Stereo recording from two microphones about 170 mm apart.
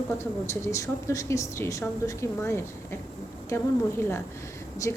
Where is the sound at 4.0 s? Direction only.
15° left (ahead or behind).